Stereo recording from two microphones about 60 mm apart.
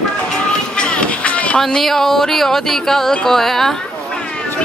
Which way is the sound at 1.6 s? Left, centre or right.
Centre.